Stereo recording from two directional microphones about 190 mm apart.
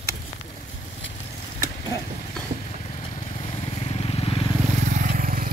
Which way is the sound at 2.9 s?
30° left (ahead or behind).